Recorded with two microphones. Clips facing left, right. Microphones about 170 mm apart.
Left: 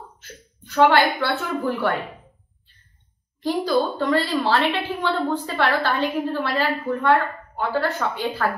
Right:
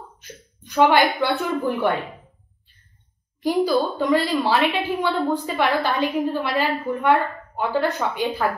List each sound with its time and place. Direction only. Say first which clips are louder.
0.2 s a woman's voice: right 1 dB; 15° right (ahead or behind)
3.6 s a woman's voice: right 1 dB; 10° right (ahead or behind)